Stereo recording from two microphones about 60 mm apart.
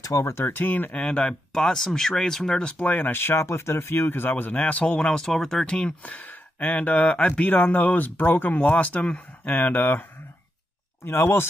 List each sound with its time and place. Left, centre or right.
0.2 s speech: left
1.0 s speech: centre
2.8 s speech: left
5.2 s speech: centre
5.8 s speech: left
11.1 s speech: left